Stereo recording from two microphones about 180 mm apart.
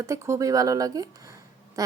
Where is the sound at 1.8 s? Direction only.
20° right (ahead or behind).